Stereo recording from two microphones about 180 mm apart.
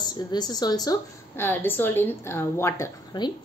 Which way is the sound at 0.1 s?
20° left (ahead or behind).